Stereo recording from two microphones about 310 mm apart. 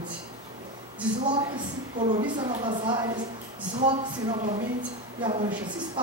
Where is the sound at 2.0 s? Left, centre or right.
Centre.